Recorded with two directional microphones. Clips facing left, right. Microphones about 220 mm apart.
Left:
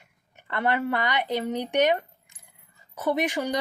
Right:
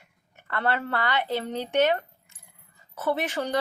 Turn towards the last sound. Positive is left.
turn(degrees=15)  # may be behind; listen again after turning